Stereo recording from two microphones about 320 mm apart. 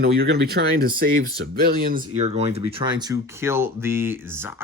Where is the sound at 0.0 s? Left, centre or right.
Right.